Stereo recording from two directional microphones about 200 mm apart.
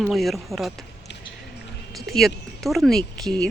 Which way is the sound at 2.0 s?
Centre (ahead or behind).